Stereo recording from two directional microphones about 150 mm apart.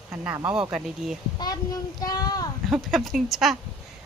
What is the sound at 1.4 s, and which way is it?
Child singing, 25° left (ahead or behind).